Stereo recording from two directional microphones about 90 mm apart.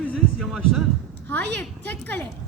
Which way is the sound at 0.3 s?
Centre (ahead or behind).